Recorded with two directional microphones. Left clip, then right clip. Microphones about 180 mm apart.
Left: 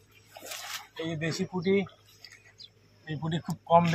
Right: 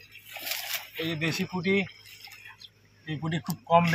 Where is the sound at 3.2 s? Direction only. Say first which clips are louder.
Right 1 dB; 5° left (ahead or behind).